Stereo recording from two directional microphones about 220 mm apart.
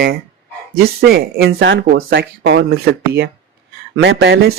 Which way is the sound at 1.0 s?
45° right (ahead or behind).